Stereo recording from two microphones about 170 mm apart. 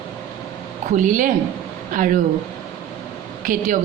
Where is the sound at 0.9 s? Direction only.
50° right (ahead or behind).